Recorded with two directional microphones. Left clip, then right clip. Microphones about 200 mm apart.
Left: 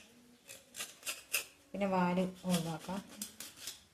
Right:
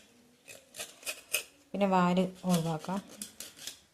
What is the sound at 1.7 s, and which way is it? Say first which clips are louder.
Speech: right 6 dB; 45° right (ahead or behind).